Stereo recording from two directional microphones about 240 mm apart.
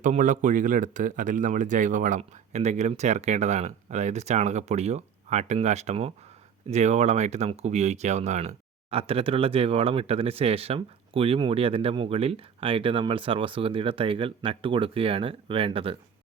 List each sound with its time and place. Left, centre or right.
0.0 s speech: right